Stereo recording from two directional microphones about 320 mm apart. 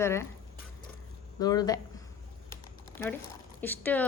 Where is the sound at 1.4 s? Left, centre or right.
Centre.